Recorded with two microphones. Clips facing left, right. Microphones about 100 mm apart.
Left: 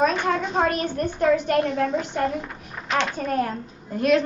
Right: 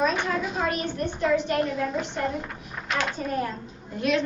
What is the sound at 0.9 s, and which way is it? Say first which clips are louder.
Speech: left 3 dB; 50° left (ahead or behind).